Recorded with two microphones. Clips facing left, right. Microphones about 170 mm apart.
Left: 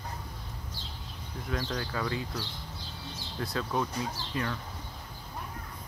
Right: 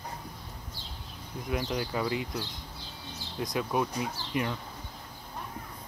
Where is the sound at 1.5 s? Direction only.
15° right (ahead or behind).